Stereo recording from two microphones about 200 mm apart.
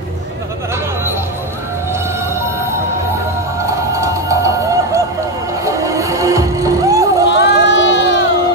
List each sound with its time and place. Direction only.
3.6 s a sound: 15° right (ahead or behind)
5.7 s music: 15° right (ahead or behind)
7.2 s run: 60° left (ahead or behind)